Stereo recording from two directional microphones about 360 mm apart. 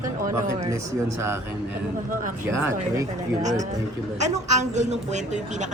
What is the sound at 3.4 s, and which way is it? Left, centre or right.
Speech, centre.